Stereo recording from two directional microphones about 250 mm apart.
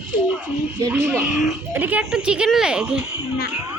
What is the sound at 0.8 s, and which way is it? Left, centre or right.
A woman's voice, centre.